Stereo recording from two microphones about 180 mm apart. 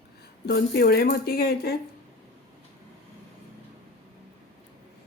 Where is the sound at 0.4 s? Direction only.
60° left (ahead or behind).